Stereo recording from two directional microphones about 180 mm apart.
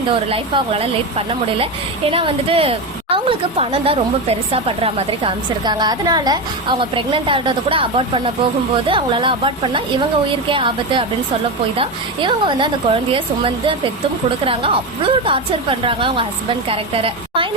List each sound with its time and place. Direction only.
0.1 s a woman's voice: 30° right (ahead or behind)